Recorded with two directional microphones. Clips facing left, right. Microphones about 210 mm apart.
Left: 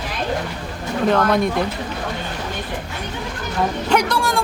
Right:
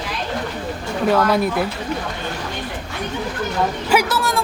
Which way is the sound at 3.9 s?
5° right (ahead or behind).